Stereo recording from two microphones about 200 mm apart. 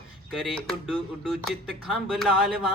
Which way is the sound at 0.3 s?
Centre (ahead or behind).